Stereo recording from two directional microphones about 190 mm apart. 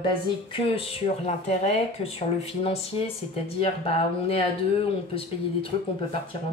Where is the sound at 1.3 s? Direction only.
35° left (ahead or behind).